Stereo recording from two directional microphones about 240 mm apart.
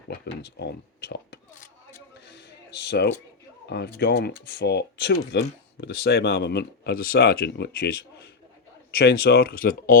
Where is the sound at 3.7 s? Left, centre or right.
Left.